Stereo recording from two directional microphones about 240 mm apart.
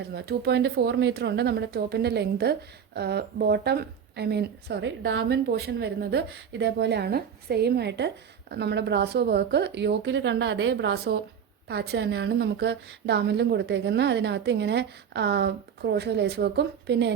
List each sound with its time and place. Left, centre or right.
0.1 s speech: right